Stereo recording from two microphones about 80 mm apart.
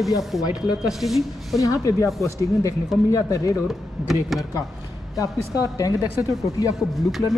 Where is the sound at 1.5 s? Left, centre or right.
Left.